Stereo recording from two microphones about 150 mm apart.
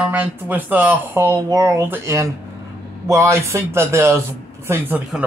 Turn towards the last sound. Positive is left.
turn(degrees=-10)  # may be behind; listen again after turning